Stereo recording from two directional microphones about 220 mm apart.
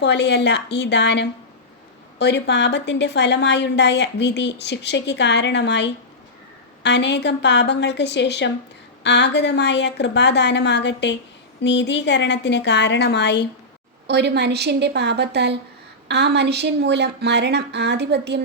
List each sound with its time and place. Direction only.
0.0 s a woman's voice: 50° left (ahead or behind)
14.1 s a woman's voice: 50° right (ahead or behind)